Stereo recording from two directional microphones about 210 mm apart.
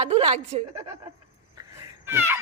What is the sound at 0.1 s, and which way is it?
Speech, 30° right (ahead or behind).